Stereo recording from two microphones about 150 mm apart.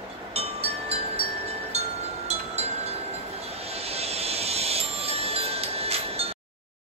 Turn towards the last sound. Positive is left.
turn(degrees=-40)  # may be behind; listen again after turning